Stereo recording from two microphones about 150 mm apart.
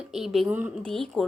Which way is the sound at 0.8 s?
5° left (ahead or behind).